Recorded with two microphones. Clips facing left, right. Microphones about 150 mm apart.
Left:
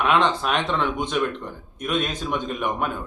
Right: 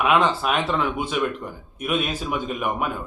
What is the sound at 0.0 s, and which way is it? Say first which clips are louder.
Speech: right 1 dB; 5° right (ahead or behind).